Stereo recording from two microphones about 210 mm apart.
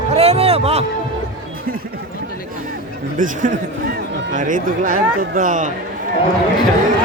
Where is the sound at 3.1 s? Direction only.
40° right (ahead or behind).